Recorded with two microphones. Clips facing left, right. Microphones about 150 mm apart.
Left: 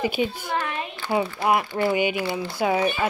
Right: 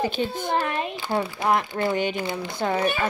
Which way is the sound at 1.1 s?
10° left (ahead or behind).